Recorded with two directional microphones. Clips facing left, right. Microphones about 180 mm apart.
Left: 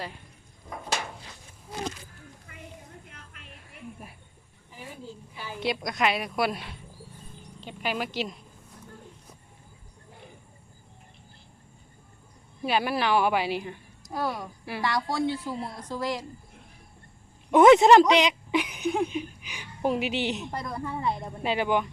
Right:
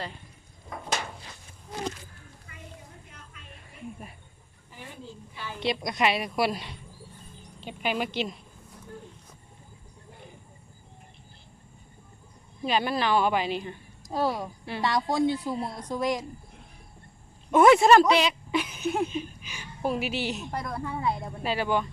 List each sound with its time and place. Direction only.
2.5 s a sound: 55° left (ahead or behind)
4.7 s a woman's voice: 5° left (ahead or behind)
12.6 s speech: 10° left (ahead or behind)
14.1 s a woman's voice: 25° right (ahead or behind)
17.5 s a sound: 20° left (ahead or behind)
19.0 s a woman's voice: 15° left (ahead or behind)
20.5 s a woman's voice: centre (ahead or behind)
21.4 s speech: 20° left (ahead or behind)